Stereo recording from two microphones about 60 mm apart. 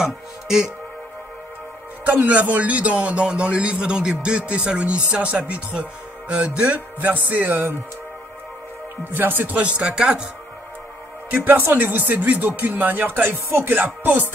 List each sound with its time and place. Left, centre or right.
0.0 s speech: centre
2.0 s a man's voice: right
9.1 s a man's voice: right; by 10.2 s centre
11.2 s speech: right